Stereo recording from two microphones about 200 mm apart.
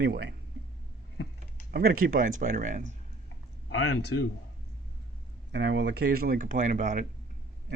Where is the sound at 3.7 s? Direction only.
70° left (ahead or behind).